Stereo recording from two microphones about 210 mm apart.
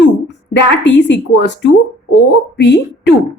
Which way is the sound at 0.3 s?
55° left (ahead or behind).